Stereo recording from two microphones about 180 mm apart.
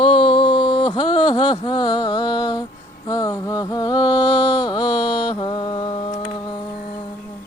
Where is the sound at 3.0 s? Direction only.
20° left (ahead or behind).